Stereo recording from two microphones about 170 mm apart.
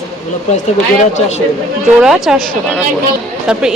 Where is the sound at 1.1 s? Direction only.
40° left (ahead or behind).